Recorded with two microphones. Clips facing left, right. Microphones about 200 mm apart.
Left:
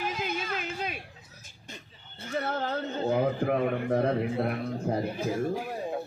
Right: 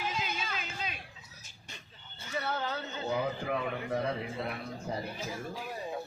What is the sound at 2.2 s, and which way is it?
A man's voice, 50° left (ahead or behind).